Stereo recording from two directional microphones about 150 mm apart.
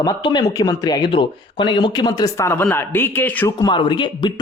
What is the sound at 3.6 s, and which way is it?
Speech, 30° left (ahead or behind).